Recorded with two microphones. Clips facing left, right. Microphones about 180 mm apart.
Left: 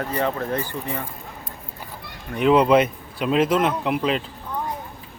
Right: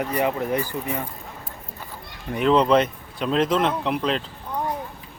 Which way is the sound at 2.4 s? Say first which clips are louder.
Left 2 dB; 10° left (ahead or behind).